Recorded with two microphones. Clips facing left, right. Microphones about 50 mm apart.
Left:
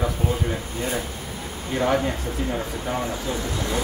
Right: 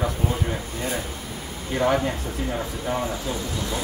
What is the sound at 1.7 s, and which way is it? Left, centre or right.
Speech, centre.